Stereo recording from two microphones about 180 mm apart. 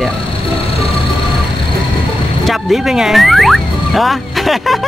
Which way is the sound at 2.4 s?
Centre (ahead or behind).